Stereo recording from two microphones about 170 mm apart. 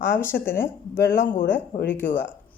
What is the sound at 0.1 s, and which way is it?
Speech, 15° left (ahead or behind).